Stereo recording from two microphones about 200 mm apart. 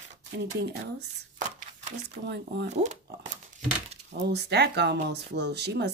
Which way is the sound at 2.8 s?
35° right (ahead or behind).